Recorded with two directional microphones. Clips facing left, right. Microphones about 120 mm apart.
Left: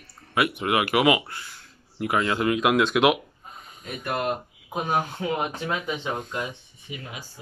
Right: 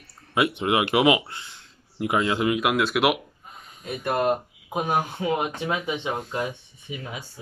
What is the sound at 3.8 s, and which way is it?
Speech, 25° right (ahead or behind).